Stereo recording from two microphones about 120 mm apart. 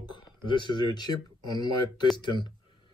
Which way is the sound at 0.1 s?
40° left (ahead or behind).